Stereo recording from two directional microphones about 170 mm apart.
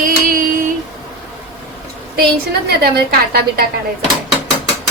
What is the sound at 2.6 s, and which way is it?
Speech, 65° right (ahead or behind).